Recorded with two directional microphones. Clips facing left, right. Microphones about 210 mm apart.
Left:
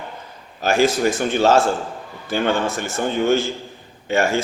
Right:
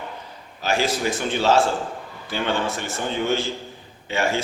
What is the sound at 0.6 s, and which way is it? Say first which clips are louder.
A man's voice: left 6 dB; 50° left (ahead or behind).